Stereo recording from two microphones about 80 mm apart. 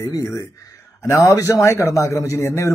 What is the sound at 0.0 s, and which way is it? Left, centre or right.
A man's voice, left.